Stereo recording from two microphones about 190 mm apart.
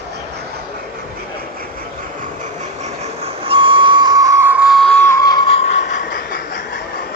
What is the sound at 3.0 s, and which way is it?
Train, 30° right (ahead or behind).